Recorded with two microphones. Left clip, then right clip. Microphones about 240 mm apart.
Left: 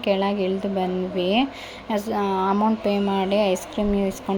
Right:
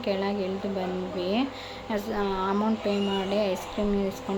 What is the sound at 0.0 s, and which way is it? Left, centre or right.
Speech, left.